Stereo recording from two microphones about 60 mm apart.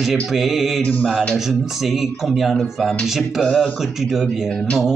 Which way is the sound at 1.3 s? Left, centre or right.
Centre.